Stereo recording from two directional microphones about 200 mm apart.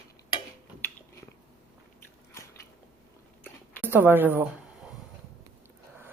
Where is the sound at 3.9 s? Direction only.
10° right (ahead or behind).